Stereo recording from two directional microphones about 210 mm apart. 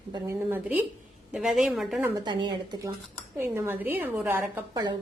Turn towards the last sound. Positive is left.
turn(degrees=-20)  # may be behind; listen again after turning